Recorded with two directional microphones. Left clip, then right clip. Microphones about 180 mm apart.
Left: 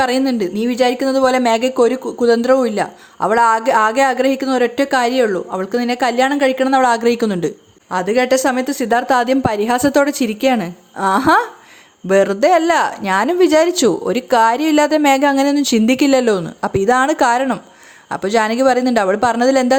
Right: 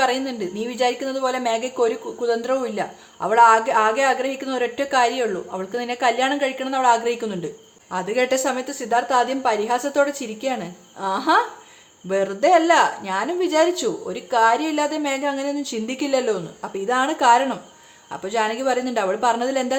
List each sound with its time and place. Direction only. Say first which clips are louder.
0.0 s speech: left 5 dB; 35° left (ahead or behind)